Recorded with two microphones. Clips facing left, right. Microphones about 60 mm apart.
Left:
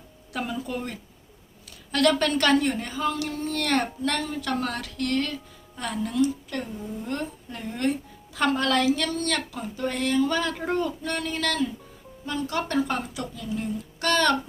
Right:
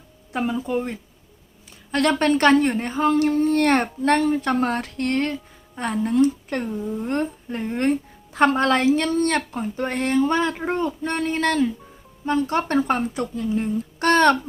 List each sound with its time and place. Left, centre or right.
0.3 s a woman's voice: right